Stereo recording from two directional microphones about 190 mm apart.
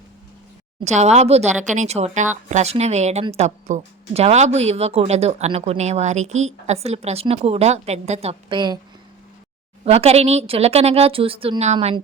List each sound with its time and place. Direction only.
0.9 s speech: 35° right (ahead or behind)
9.8 s speech: 35° right (ahead or behind)